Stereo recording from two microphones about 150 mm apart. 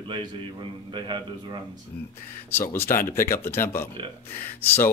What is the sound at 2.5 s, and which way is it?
Speech, 15° left (ahead or behind).